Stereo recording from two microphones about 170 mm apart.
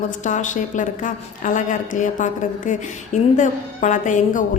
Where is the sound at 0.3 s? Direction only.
45° left (ahead or behind).